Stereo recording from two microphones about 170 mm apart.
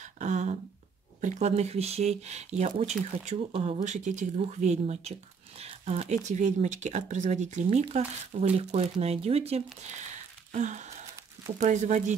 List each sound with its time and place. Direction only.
0.0 s a sound: 45° right (ahead or behind)
1.2 s speech: 40° right (ahead or behind)
10.5 s gasp: 45° right (ahead or behind)
11.5 s speech: 45° right (ahead or behind)